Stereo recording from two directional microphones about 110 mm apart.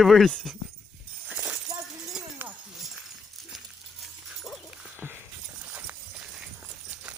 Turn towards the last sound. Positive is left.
turn(degrees=-10)  # may be behind; listen again after turning